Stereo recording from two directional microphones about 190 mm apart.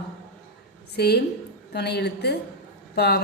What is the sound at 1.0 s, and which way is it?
A woman's voice, 60° left (ahead or behind).